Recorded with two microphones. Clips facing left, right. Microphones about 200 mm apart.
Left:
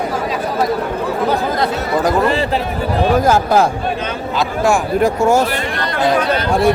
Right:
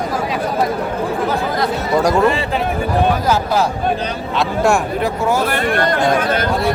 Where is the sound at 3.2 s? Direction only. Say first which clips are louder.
Left 3 dB; 50° left (ahead or behind).